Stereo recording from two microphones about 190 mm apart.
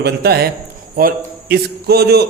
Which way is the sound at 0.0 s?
55° right (ahead or behind).